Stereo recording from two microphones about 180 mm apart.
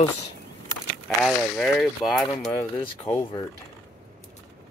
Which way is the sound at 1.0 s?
Centre (ahead or behind).